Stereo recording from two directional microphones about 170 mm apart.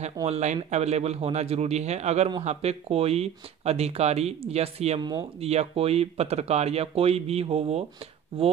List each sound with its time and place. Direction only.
0.0 s speech: 40° right (ahead or behind)